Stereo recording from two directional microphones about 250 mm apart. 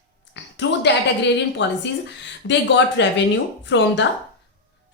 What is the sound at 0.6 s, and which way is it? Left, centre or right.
A woman's voice, left.